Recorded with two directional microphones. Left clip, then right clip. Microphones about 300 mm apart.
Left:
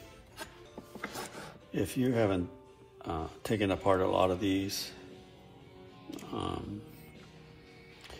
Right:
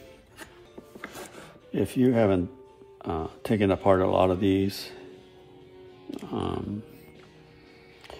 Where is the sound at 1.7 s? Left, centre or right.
Right.